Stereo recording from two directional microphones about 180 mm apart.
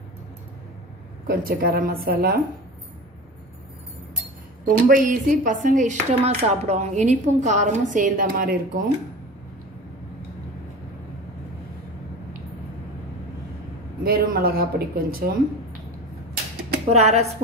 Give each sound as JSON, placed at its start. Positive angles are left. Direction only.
{"t": 1.2, "sound": "speech", "side_deg": -55}
{"t": 4.6, "sound": "speech", "side_deg": -50}
{"t": 14.0, "sound": "speech", "side_deg": -55}
{"t": 16.9, "sound": "speech", "side_deg": -40}